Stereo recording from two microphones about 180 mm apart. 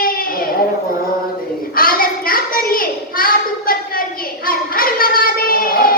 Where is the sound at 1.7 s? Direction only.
50° left (ahead or behind).